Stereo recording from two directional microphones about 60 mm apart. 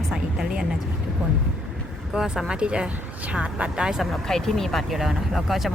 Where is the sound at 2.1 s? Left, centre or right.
Centre.